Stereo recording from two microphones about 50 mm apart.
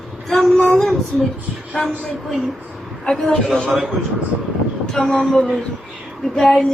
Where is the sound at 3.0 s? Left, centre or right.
Centre.